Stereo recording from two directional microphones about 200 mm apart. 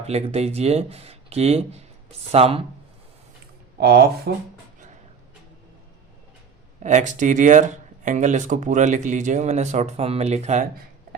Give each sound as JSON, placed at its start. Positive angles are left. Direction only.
{"t": 0.0, "sound": "speech", "side_deg": -30}
{"t": 3.8, "sound": "speech", "side_deg": -50}
{"t": 6.8, "sound": "speech", "side_deg": -40}